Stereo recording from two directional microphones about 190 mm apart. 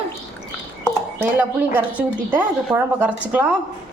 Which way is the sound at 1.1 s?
10° right (ahead or behind).